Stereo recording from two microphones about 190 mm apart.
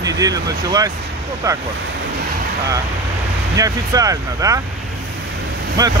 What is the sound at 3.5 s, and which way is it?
Speech, 20° right (ahead or behind).